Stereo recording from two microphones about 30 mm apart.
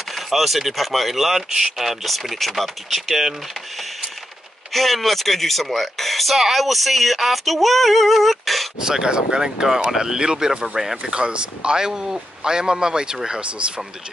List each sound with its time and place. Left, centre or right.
0.1 s speech: centre
4.7 s speech: centre
8.8 s a man's voice: right
9.7 s speech: centre
11.1 s a man's voice: right
13.4 s speech: right